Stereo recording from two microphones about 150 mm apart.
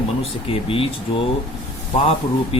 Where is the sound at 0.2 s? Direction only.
40° left (ahead or behind).